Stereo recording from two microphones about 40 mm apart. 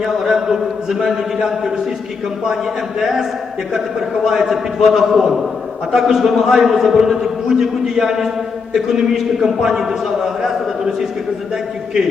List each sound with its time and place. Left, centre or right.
0.3 s a man's voice: centre
4.1 s a man's voice: centre